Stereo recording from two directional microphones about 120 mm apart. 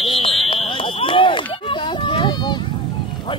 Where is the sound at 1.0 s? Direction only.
45° left (ahead or behind).